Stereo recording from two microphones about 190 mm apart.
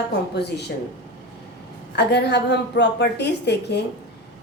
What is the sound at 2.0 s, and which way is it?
A woman's voice, 60° left (ahead or behind).